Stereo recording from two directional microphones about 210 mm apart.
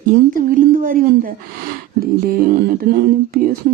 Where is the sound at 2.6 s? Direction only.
45° right (ahead or behind).